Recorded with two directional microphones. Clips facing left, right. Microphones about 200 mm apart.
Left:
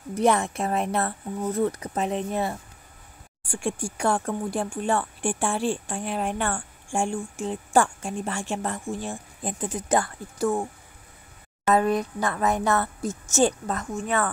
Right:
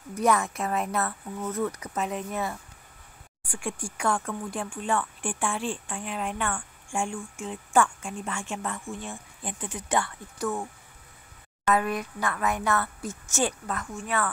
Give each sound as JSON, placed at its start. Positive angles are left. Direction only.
{"t": 0.1, "sound": "speech", "side_deg": 30}
{"t": 3.9, "sound": "speech", "side_deg": 35}
{"t": 7.2, "sound": "speech", "side_deg": 40}
{"t": 8.2, "sound": "speech", "side_deg": 30}
{"t": 11.7, "sound": "speech", "side_deg": 35}
{"t": 12.6, "sound": "speech", "side_deg": 20}
{"t": 13.0, "sound": "speech", "side_deg": 40}